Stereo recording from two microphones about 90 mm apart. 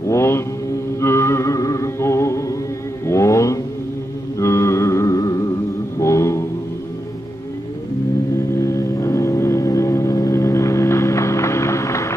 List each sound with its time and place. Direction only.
0.0 s mantra: 30° left (ahead or behind)
1.0 s music: 30° left (ahead or behind)
3.1 s vehicle: 35° left (ahead or behind)
4.4 s humming: 30° left (ahead or behind)
5.9 s mantra: 35° left (ahead or behind)
8.5 s music: 35° left (ahead or behind)